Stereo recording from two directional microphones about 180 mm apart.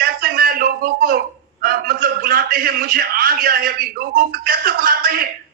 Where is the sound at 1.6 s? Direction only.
55° right (ahead or behind).